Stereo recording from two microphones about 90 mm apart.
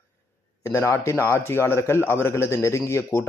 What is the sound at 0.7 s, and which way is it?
A man's voice, 30° left (ahead or behind).